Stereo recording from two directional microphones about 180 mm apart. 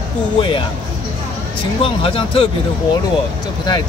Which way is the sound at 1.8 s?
30° left (ahead or behind).